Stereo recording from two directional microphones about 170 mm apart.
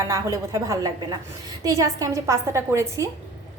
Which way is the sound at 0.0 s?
20° right (ahead or behind).